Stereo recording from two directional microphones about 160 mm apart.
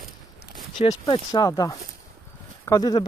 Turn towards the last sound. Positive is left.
turn(degrees=25)  # may be behind; listen again after turning